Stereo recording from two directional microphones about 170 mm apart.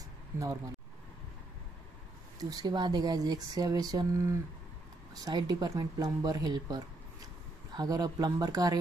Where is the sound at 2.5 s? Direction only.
20° right (ahead or behind).